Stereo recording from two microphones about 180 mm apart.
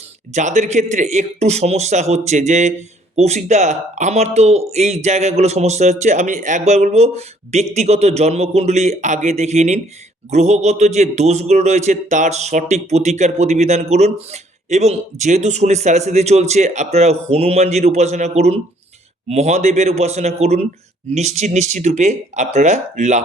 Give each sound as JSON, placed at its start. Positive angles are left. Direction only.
{"t": 0.3, "sound": "speech", "side_deg": -40}